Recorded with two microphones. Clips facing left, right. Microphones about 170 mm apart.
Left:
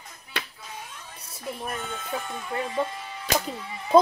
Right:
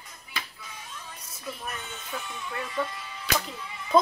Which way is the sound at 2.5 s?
35° left (ahead or behind).